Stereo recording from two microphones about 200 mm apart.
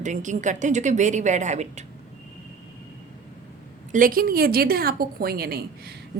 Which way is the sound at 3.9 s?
45° right (ahead or behind).